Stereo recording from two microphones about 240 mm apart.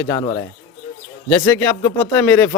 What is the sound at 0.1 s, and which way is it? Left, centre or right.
Speech, left.